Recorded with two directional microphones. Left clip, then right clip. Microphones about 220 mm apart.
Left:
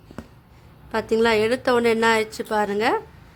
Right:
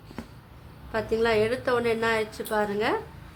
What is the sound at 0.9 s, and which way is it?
A woman's voice, 50° left (ahead or behind).